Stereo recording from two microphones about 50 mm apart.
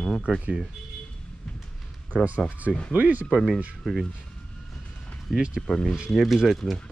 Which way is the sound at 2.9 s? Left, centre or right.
Right.